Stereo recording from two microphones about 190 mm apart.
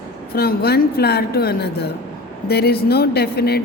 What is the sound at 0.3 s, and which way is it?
A woman's voice, 55° left (ahead or behind).